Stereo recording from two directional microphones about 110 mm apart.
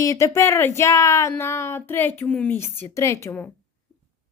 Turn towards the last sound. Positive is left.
turn(degrees=20)  # may be behind; listen again after turning